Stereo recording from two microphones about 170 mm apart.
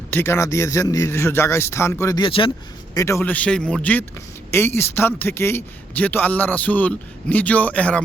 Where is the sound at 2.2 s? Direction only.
30° left (ahead or behind).